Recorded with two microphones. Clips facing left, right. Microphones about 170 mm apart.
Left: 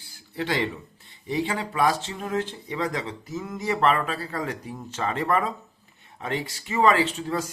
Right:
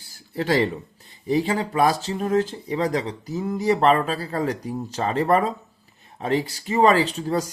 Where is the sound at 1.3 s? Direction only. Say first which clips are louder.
Right 5 dB; 35° right (ahead or behind).